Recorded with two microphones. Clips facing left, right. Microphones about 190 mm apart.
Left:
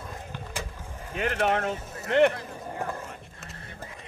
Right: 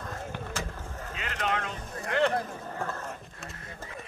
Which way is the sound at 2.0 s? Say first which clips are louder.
Left 6 dB; 20° left (ahead or behind).